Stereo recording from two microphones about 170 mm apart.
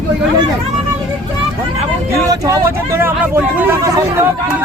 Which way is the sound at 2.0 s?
20° right (ahead or behind).